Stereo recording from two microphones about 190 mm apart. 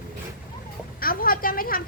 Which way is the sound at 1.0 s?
50° left (ahead or behind).